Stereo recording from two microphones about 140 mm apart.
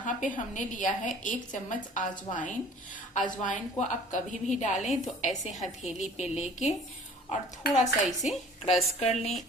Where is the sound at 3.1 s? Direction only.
65° left (ahead or behind).